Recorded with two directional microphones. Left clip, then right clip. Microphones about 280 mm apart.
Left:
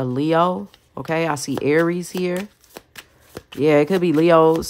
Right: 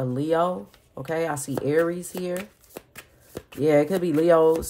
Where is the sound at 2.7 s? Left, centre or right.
Centre.